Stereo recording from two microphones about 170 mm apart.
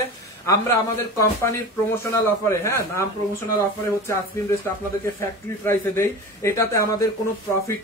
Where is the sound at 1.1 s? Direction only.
15° left (ahead or behind).